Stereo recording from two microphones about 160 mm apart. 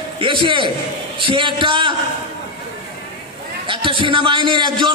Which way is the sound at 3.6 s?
30° right (ahead or behind).